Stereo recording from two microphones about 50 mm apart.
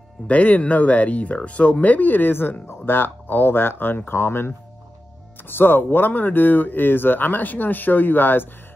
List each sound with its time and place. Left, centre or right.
0.3 s speech: left